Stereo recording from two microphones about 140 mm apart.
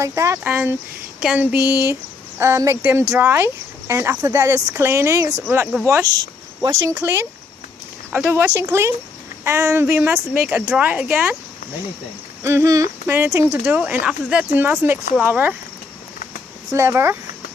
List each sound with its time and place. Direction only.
0.0 s a woman's voice: 20° right (ahead or behind)
6.9 s a woman's voice: 15° right (ahead or behind)
12.4 s a woman's voice: 20° right (ahead or behind)
16.7 s speech: 20° right (ahead or behind)